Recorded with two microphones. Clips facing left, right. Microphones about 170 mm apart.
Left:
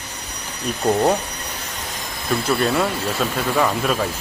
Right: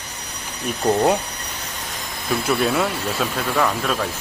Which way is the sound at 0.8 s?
5° right (ahead or behind).